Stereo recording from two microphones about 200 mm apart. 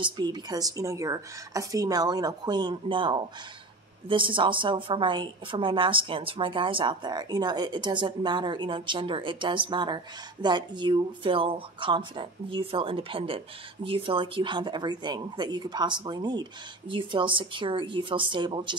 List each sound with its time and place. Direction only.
0.0 s a woman's voice: 20° right (ahead or behind)